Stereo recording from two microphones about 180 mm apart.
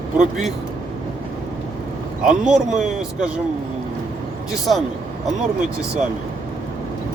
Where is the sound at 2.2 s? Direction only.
5° right (ahead or behind).